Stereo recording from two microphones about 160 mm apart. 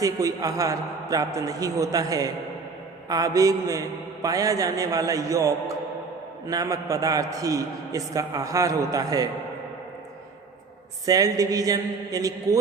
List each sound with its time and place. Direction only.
0.0 s a man's voice: 20° right (ahead or behind)
11.0 s a man's voice: 20° right (ahead or behind)